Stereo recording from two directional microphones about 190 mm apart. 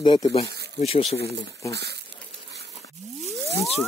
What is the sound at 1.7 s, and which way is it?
Speech, 60° right (ahead or behind).